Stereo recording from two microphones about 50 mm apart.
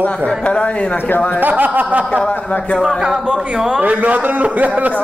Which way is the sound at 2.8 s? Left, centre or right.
Centre.